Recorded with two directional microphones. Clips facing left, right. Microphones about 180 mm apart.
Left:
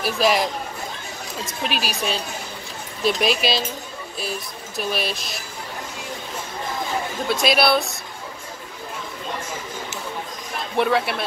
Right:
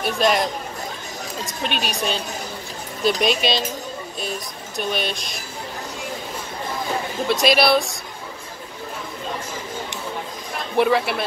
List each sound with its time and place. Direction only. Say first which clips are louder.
0.0 s speech: even; centre (ahead or behind)
7.2 s speech: right 2 dB; centre (ahead or behind)
10.8 s speech: right 2 dB; centre (ahead or behind)